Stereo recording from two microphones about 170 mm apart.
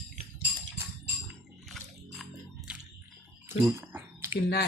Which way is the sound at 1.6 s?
Centre (ahead or behind).